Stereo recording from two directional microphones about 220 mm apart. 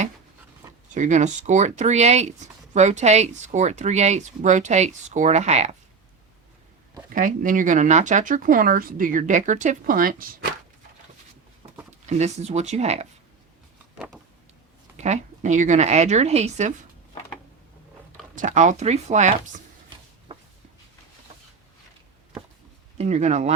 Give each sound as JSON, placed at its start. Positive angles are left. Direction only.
{"t": 0.9, "sound": "speech", "side_deg": -35}
{"t": 7.1, "sound": "speech", "side_deg": -35}
{"t": 12.0, "sound": "speech", "side_deg": -30}
{"t": 14.9, "sound": "speech", "side_deg": -30}
{"t": 18.3, "sound": "speech", "side_deg": -35}
{"t": 20.3, "sound": "a sound", "side_deg": -25}
{"t": 23.0, "sound": "speech", "side_deg": -30}